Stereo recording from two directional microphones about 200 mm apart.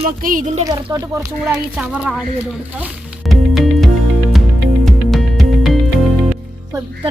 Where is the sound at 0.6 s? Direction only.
20° right (ahead or behind).